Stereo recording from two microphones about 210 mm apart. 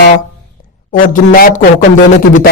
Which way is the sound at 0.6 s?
40° left (ahead or behind).